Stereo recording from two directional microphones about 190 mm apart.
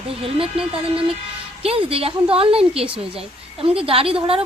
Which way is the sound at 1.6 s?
30° right (ahead or behind).